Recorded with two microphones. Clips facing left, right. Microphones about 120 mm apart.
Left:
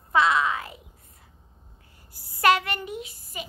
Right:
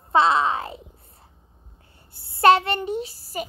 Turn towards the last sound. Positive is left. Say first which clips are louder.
# right 7 dB
turn(degrees=-35)  # may be behind; listen again after turning